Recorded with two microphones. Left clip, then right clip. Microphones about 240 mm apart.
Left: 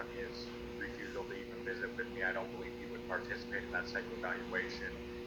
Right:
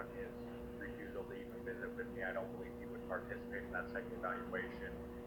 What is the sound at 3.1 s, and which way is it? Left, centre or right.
Speech, left.